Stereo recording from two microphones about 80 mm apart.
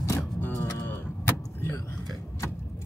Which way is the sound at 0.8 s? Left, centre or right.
Left.